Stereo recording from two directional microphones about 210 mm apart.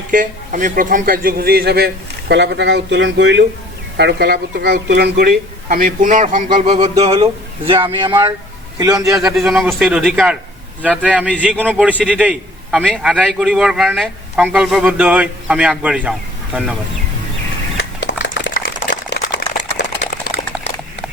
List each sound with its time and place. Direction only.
0.1 s speech: 40° right (ahead or behind)
6.5 s a man's voice: 30° right (ahead or behind)
9.1 s a man's voice: centre (ahead or behind)
17.7 s a sound: 60° left (ahead or behind)